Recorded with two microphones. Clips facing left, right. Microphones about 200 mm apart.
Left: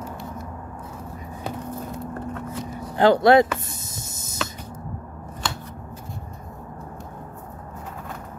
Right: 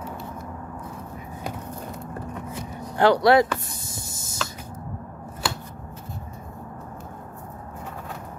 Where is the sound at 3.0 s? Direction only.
25° left (ahead or behind).